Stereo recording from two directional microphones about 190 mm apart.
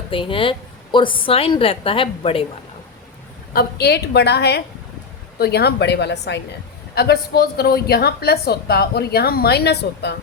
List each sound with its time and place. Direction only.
0.1 s a woman's voice: 25° left (ahead or behind)
3.5 s a woman's voice: 55° left (ahead or behind)